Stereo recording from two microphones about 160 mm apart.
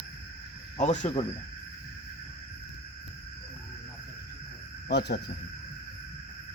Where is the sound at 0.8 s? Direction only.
45° left (ahead or behind).